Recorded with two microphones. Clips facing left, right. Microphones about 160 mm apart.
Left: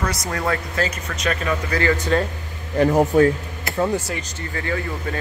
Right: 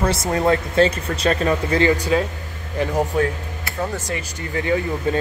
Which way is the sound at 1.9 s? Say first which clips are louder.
Right 1 dB; 10° right (ahead or behind).